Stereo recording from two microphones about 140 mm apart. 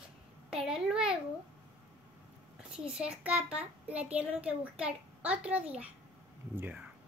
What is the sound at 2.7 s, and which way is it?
A child's voice, 5° right (ahead or behind).